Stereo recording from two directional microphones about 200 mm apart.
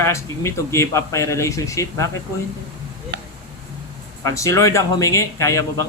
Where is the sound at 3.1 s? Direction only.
60° right (ahead or behind).